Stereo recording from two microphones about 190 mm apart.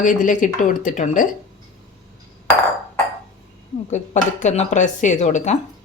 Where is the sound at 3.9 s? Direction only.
40° left (ahead or behind).